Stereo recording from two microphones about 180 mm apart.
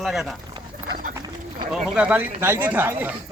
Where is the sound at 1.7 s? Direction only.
5° right (ahead or behind).